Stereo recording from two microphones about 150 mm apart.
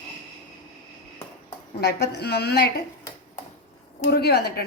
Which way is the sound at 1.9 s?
90° left.